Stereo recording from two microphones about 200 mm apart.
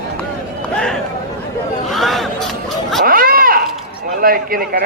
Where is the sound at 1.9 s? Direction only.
Centre (ahead or behind).